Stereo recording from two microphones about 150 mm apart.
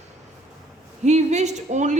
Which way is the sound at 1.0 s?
50° right (ahead or behind).